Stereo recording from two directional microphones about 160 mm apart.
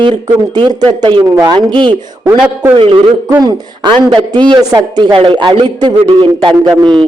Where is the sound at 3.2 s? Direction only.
20° right (ahead or behind).